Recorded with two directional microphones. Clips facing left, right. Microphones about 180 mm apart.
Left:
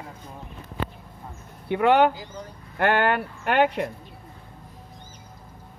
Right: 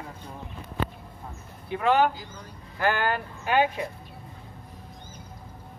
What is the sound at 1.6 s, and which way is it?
Speech, 65° left (ahead or behind).